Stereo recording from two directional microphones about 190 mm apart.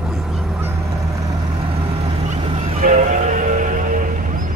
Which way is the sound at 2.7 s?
40° right (ahead or behind).